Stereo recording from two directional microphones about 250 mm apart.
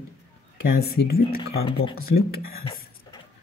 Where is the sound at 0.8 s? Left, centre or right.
Left.